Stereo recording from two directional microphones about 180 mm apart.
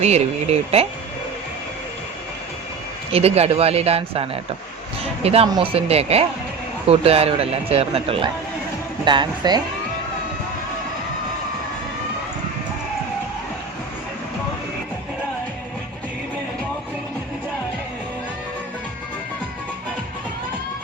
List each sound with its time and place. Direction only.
0.0 s speech: 35° right (ahead or behind)
3.1 s speech: 35° right (ahead or behind)